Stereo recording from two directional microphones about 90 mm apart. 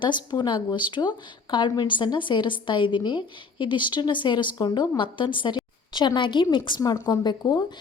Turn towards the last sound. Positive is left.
turn(degrees=50)  # may be behind; listen again after turning